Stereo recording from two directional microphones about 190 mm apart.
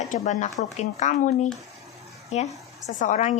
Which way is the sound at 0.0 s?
40° left (ahead or behind).